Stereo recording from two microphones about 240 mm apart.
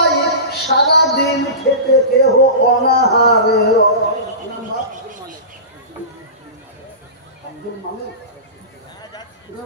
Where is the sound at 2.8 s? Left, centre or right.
Left.